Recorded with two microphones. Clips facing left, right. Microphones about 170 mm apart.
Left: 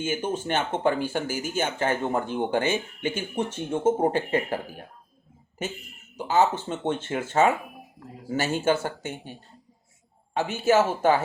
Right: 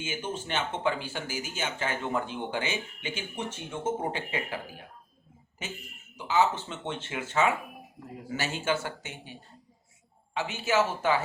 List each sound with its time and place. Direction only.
0.0 s speech: 50° left (ahead or behind)
6.1 s speech: 45° left (ahead or behind)
10.3 s speech: 45° left (ahead or behind)